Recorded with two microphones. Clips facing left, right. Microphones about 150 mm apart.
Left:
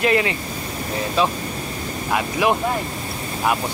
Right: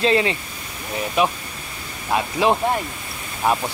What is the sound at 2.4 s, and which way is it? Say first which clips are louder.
Speech: right 1 dB; 25° right (ahead or behind).